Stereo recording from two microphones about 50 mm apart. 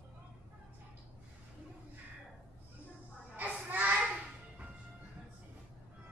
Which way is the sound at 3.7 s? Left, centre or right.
Right.